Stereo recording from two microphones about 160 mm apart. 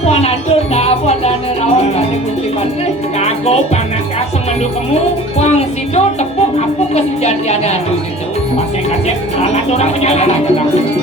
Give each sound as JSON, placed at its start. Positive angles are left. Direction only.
{"t": 0.0, "sound": "music", "side_deg": 40}
{"t": 3.2, "sound": "music", "side_deg": 40}
{"t": 5.5, "sound": "music", "side_deg": 45}
{"t": 9.7, "sound": "speech", "side_deg": 45}